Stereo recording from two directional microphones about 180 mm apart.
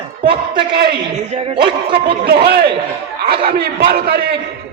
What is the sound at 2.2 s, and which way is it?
A man's voice, 60° right (ahead or behind).